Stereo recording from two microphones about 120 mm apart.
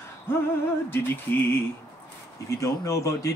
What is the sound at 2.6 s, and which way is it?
Speech, 25° left (ahead or behind).